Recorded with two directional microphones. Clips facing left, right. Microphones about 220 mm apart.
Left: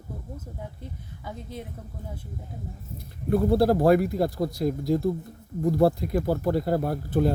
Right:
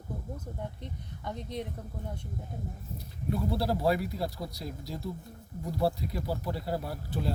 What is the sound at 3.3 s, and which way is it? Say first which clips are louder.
Speech: left 10 dB; 55° left (ahead or behind).